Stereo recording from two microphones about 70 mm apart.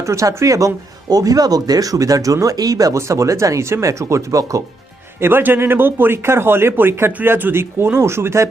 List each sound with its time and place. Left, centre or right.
0.0 s speech: right
1.1 s speech: right
3.0 s speech: right
5.2 s speech: right